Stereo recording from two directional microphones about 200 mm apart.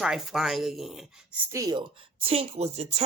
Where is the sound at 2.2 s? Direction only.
30° right (ahead or behind).